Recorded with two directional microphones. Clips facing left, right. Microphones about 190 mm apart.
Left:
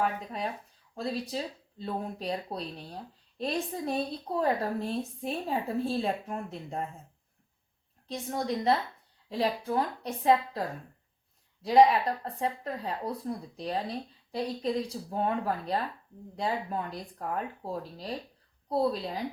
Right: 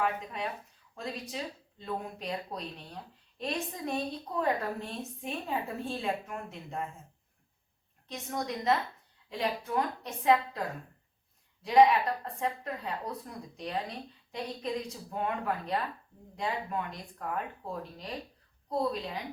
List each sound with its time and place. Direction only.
0.0 s speech: 35° left (ahead or behind)
8.0 s speech: 30° left (ahead or behind)